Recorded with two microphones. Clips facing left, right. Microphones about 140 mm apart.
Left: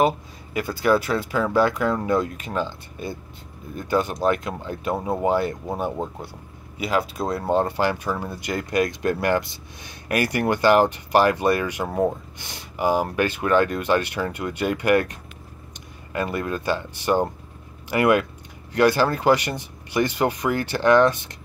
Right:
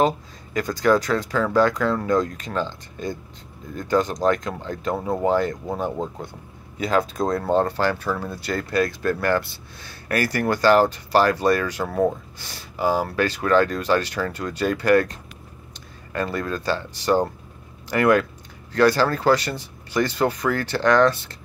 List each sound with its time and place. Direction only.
0.0 s speech: 10° left (ahead or behind)
7.4 s speech: 15° left (ahead or behind)